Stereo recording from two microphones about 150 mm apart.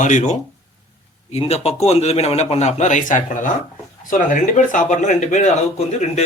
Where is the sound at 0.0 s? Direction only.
55° left (ahead or behind).